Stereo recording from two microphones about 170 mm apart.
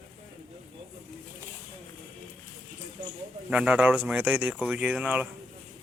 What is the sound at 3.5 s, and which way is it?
Speech, 5° right (ahead or behind).